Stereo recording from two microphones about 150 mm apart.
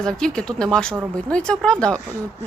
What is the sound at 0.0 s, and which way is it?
A woman's voice, 5° left (ahead or behind).